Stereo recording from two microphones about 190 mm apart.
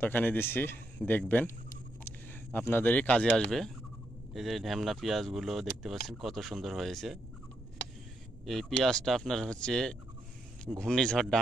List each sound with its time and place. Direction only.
0.0 s a man's voice: 10° left (ahead or behind)
8.5 s speech: centre (ahead or behind)